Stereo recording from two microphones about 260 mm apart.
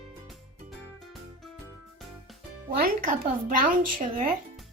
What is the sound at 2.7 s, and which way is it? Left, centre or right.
Speech, right.